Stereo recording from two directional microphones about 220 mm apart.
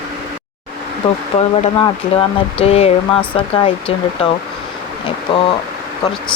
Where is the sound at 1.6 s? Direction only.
25° left (ahead or behind).